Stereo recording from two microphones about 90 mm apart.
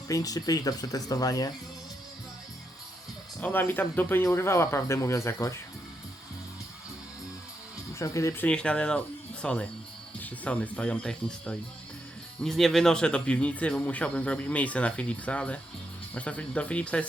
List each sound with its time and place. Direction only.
0.1 s speech: 40° left (ahead or behind)
3.4 s speech: 20° left (ahead or behind)
7.9 s speech: 35° left (ahead or behind)
8.4 s speech: 10° left (ahead or behind)